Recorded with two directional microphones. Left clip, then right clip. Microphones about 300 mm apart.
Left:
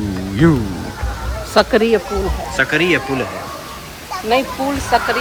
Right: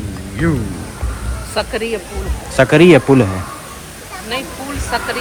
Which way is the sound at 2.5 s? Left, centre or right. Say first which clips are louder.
Right 7 dB; centre.